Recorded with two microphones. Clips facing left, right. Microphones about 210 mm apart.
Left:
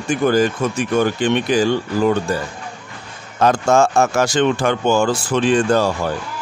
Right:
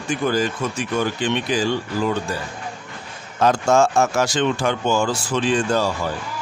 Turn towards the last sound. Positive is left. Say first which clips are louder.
# left 4 dB
turn(degrees=55)  # may be behind; listen again after turning